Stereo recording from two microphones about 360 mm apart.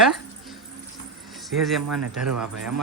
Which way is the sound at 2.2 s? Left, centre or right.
Centre.